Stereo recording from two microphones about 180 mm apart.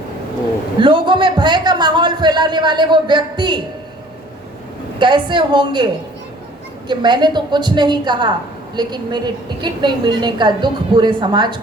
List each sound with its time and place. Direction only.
0.8 s a man's voice: 25° right (ahead or behind)
4.9 s a woman's voice: 25° right (ahead or behind)